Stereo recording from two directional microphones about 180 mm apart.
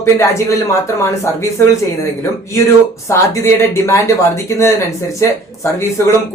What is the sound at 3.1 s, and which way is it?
Speech, 15° left (ahead or behind).